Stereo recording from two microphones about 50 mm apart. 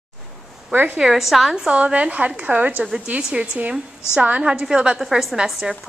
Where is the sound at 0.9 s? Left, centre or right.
Centre.